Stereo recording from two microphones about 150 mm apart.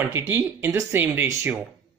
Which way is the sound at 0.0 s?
15° right (ahead or behind).